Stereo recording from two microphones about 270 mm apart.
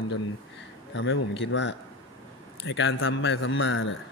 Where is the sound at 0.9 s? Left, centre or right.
Left.